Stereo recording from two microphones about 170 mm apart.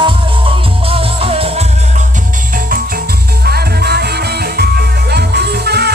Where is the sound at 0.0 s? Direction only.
30° right (ahead or behind).